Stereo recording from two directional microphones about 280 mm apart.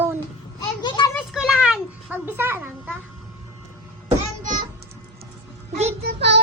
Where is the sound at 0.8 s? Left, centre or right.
Centre.